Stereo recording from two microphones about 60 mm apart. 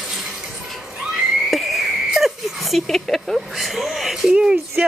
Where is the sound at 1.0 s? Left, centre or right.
Centre.